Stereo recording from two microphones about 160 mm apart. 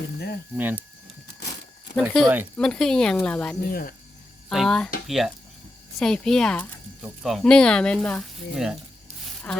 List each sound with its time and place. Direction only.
0.5 s speech: 10° right (ahead or behind)
2.0 s speech: centre (ahead or behind)
3.7 s speech: 65° left (ahead or behind)
4.4 s speech: centre (ahead or behind)